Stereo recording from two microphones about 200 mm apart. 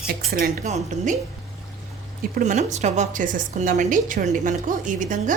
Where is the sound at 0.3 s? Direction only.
50° right (ahead or behind).